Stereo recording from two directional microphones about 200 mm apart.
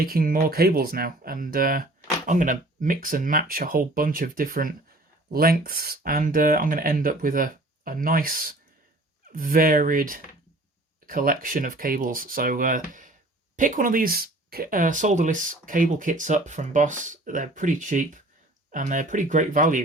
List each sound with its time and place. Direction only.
0.0 s speech: 45° right (ahead or behind)